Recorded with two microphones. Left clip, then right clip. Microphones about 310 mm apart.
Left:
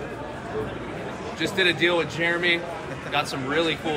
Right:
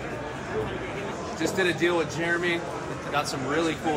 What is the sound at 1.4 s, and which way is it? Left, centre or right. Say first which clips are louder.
Speech: left 3 dB; centre.